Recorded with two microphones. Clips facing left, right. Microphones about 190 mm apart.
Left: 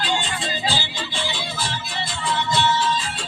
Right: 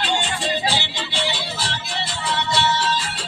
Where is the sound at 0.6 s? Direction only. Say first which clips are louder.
Right 1 dB; 70° right (ahead or behind).